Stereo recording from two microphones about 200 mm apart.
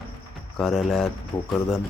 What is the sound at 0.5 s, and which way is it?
Speech, centre (ahead or behind).